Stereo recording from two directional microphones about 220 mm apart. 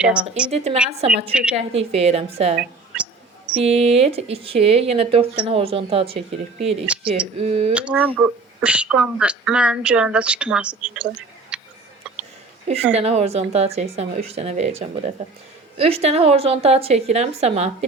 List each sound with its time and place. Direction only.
0.0 s speech: 5° right (ahead or behind)
0.5 s speech: 30° right (ahead or behind)
1.3 s speech: 5° right (ahead or behind)
1.5 s speech: 30° right (ahead or behind)
2.6 s speech: 5° right (ahead or behind)
3.6 s speech: 25° right (ahead or behind)
6.8 s speech: 5° right (ahead or behind)
7.3 s speech: 30° right (ahead or behind)
7.7 s speech: 5° right (ahead or behind)
11.5 s tick-tock: 5° right (ahead or behind)
12.9 s speech: 30° right (ahead or behind)